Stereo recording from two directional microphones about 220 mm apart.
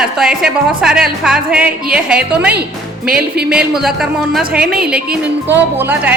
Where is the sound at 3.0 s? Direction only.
45° right (ahead or behind).